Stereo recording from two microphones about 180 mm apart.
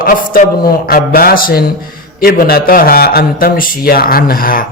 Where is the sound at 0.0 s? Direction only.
50° left (ahead or behind).